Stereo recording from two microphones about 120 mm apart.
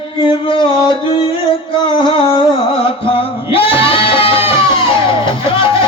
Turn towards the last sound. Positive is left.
turn(degrees=45)  # may be behind; listen again after turning